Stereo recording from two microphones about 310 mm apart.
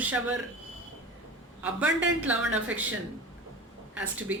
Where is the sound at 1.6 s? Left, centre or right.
Centre.